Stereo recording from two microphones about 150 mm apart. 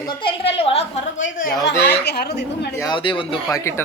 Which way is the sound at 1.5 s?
15° left (ahead or behind).